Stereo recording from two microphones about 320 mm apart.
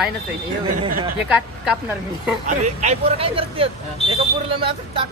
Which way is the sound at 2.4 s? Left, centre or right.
Right.